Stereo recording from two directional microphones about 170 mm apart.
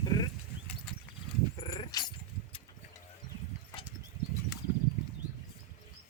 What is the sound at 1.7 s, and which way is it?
Dog, 25° left (ahead or behind).